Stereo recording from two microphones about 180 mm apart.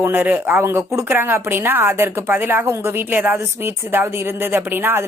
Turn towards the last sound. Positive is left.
turn(degrees=-10)  # may be behind; listen again after turning